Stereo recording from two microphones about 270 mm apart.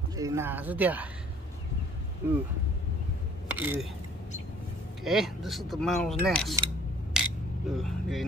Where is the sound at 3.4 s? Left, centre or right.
Centre.